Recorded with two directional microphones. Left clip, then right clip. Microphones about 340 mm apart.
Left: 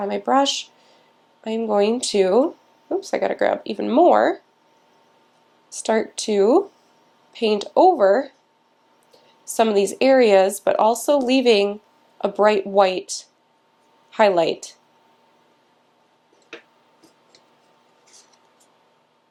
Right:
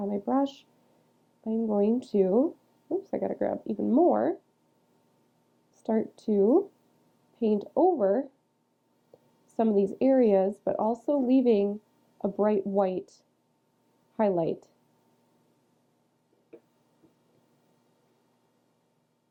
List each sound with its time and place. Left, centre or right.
0.0 s speech: centre
2.3 s a sound: centre
3.0 s speech: centre
5.7 s speech: centre
7.7 s speech: centre
8.0 s speech: centre
9.6 s speech: centre